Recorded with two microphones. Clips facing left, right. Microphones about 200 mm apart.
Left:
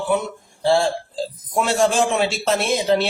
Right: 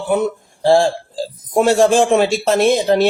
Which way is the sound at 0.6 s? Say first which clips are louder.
Right 5 dB; 45° right (ahead or behind).